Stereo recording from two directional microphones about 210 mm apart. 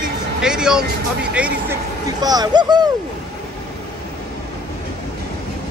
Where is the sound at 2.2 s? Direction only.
20° right (ahead or behind).